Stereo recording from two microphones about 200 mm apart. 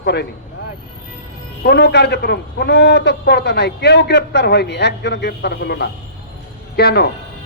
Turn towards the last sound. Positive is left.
turn(degrees=55)  # may be behind; listen again after turning